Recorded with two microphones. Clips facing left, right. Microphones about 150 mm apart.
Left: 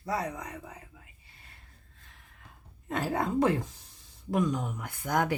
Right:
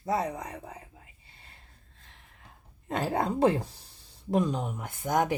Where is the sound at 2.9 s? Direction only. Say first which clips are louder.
Right 1 dB; 25° right (ahead or behind).